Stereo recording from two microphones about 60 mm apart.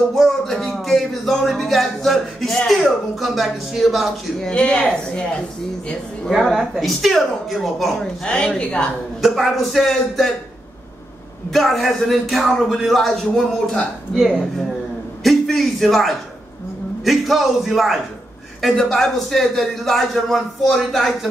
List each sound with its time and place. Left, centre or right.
0.1 s a man's voice: centre
4.4 s speech: centre
6.3 s a man's voice: centre
9.2 s a man's voice: centre
11.5 s a man's voice: centre